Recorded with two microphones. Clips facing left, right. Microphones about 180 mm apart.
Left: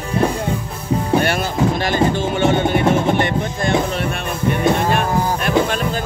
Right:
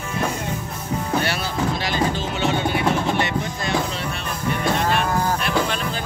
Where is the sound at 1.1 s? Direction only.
50° left (ahead or behind).